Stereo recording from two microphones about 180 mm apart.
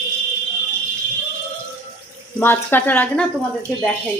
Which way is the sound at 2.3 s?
10° left (ahead or behind).